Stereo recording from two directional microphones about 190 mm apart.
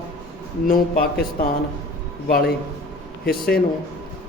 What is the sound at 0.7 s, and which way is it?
Speech, 45° left (ahead or behind).